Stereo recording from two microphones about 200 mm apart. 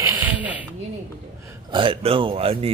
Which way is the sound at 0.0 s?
10° right (ahead or behind).